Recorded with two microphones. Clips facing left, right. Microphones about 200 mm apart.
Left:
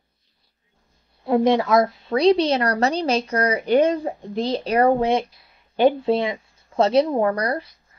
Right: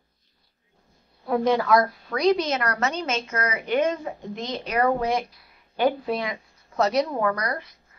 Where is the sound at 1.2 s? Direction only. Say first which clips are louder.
Left 4 dB; 25° left (ahead or behind).